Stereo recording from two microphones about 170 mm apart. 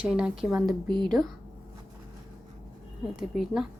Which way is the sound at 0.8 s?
25° right (ahead or behind).